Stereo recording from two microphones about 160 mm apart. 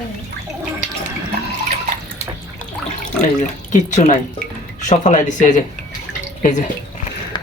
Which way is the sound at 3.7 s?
45° left (ahead or behind).